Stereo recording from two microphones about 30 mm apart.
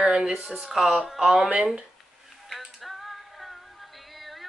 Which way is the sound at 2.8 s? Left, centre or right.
Centre.